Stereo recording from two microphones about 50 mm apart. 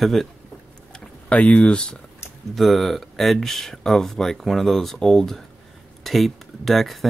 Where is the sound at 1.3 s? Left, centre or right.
Left.